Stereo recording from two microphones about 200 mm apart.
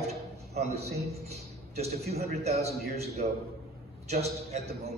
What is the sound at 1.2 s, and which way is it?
A man's voice, 30° right (ahead or behind).